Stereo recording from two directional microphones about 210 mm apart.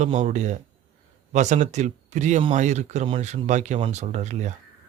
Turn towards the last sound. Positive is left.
turn(degrees=-35)  # may be behind; listen again after turning